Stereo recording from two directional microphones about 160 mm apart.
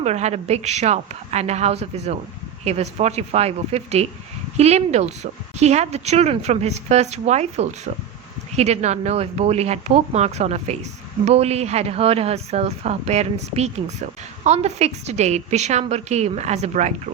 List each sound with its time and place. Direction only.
0.0 s speech: 45° right (ahead or behind)